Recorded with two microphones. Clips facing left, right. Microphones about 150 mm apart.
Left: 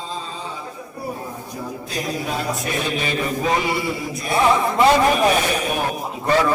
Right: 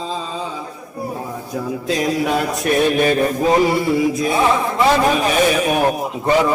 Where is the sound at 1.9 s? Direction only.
90° right.